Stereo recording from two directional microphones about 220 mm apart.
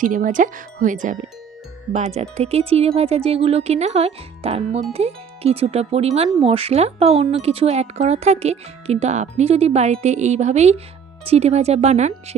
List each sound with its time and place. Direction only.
0.0 s wind chime: 35° right (ahead or behind)
1.9 s speech: 30° right (ahead or behind)